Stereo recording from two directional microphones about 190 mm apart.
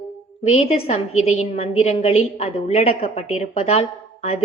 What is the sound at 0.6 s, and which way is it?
A woman's voice, 30° left (ahead or behind).